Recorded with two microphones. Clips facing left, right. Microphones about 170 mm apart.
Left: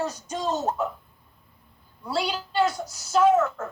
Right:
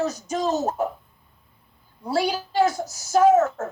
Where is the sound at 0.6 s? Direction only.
65° right (ahead or behind).